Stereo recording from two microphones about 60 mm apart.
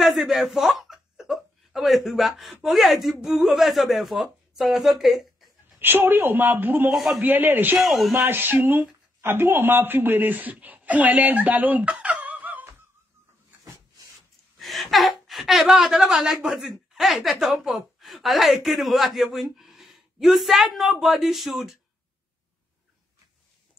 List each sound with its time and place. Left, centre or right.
0.0 s speech: centre
5.8 s a woman's voice: right
6.9 s a woman's voice: centre
7.2 s a woman's voice: right
7.8 s a woman's voice: centre
8.1 s a woman's voice: right
14.6 s a woman's voice: centre